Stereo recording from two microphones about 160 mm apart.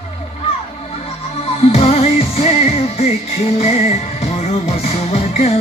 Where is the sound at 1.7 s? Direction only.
40° left (ahead or behind).